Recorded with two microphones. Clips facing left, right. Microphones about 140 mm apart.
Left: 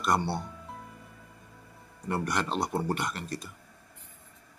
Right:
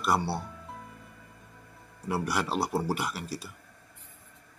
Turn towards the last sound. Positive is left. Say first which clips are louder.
# even
turn(degrees=-5)  # may be behind; listen again after turning